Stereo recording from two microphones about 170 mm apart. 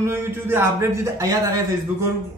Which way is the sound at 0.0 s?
15° right (ahead or behind).